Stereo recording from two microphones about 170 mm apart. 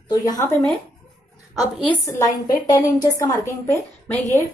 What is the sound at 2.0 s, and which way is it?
A woman's voice, 20° left (ahead or behind).